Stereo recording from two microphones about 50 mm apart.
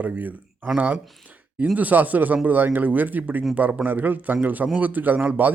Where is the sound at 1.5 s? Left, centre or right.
Right.